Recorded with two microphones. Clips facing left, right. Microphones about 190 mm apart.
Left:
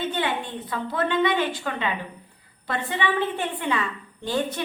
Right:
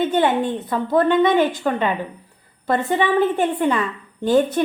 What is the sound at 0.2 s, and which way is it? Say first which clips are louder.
A woman's voice: right 9 dB; 45° right (ahead or behind).